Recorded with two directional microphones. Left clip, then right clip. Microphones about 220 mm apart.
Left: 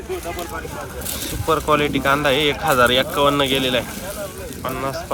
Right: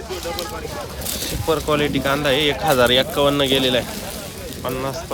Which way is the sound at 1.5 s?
10° right (ahead or behind).